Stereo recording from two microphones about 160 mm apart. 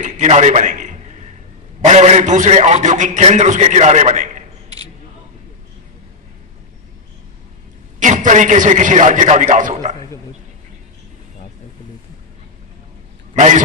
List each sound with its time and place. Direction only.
0.0 s a sound: 45° right (ahead or behind)
1.8 s a man's voice: 45° right (ahead or behind)
7.9 s a man's voice: 50° right (ahead or behind)
13.3 s a man's voice: 50° right (ahead or behind)